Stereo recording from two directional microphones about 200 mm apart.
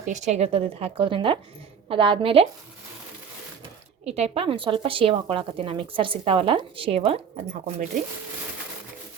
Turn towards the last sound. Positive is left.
turn(degrees=-35)  # may be behind; listen again after turning